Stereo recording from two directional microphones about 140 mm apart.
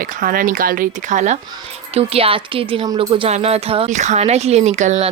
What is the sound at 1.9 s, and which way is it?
A woman's voice, 45° right (ahead or behind).